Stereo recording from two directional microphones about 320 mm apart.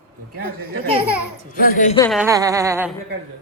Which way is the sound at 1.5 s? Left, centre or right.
Left.